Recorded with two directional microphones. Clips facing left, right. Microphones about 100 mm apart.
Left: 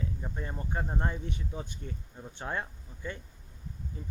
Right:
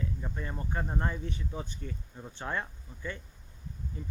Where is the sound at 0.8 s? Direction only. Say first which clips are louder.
Even; 10° left (ahead or behind).